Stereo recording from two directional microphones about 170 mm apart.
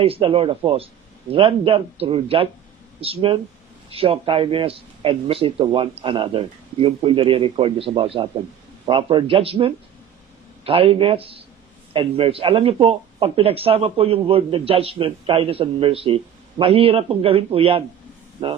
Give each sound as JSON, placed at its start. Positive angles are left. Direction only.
{"t": 0.0, "sound": "speech", "side_deg": -35}